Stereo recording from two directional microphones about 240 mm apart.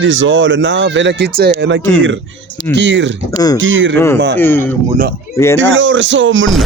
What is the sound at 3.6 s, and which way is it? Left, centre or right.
Speech, right.